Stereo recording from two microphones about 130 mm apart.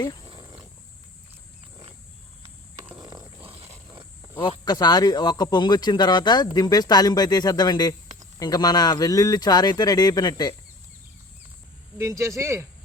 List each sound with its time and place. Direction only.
0.3 s wild animals: 35° right (ahead or behind)
3.4 s a sound: 45° right (ahead or behind)
4.6 s speech: 30° left (ahead or behind)
11.9 s speech: 25° right (ahead or behind)